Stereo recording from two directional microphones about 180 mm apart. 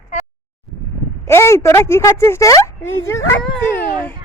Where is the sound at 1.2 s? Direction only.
15° left (ahead or behind).